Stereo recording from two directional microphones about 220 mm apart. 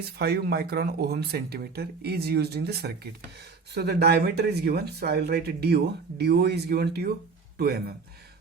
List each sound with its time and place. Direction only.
0.2 s speech: 45° right (ahead or behind)